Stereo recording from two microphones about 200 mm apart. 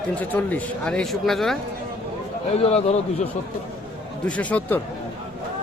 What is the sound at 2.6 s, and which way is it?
Speech, 30° left (ahead or behind).